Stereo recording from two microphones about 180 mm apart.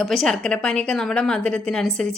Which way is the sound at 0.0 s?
Centre (ahead or behind).